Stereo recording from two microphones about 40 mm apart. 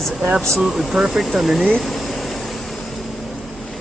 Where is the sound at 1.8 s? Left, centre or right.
Centre.